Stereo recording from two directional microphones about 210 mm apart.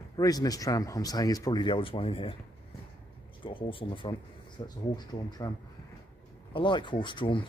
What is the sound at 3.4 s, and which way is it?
Speech, 25° left (ahead or behind).